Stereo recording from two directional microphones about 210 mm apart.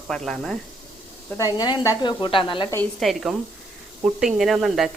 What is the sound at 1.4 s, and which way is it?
Speech, 20° left (ahead or behind).